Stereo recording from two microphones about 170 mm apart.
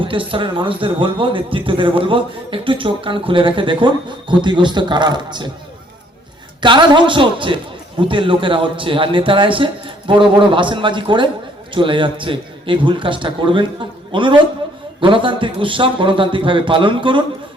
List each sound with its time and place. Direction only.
0.0 s a man's voice: 30° right (ahead or behind)
6.6 s a man's voice: 25° right (ahead or behind)